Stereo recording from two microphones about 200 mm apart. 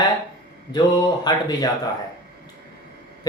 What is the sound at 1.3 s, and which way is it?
Speech, 20° left (ahead or behind).